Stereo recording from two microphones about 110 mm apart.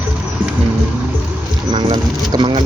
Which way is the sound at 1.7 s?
45° right (ahead or behind).